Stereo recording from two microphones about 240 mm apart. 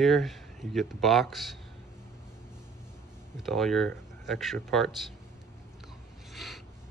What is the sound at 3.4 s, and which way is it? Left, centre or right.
Speech, centre.